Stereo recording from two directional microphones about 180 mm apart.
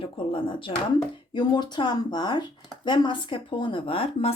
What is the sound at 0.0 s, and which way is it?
A woman's voice, 30° left (ahead or behind).